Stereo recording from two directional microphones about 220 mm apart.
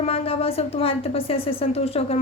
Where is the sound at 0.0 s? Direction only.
25° left (ahead or behind).